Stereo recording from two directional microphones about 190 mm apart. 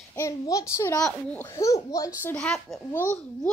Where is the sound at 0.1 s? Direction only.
15° left (ahead or behind).